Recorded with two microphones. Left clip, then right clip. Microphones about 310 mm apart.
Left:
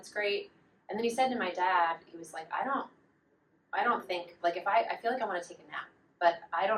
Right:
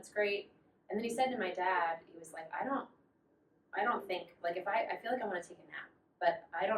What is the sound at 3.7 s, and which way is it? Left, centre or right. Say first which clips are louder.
A woman's voice: left 4 dB; centre.